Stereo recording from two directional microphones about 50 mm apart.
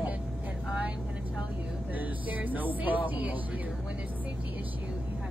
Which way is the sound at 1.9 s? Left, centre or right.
Right.